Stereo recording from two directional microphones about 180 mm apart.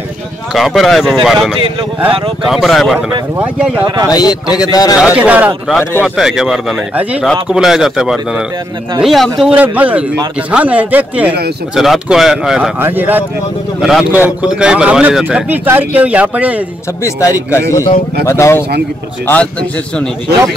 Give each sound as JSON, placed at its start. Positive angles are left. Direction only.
{"t": 0.6, "sound": "a man's voice", "side_deg": 0}
{"t": 3.8, "sound": "speech", "side_deg": -25}
{"t": 4.1, "sound": "a man's voice", "side_deg": 20}
{"t": 5.0, "sound": "a man's voice", "side_deg": -5}
{"t": 18.2, "sound": "speech", "side_deg": 15}